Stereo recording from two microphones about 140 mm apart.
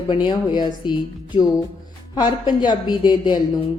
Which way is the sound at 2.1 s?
30° left (ahead or behind).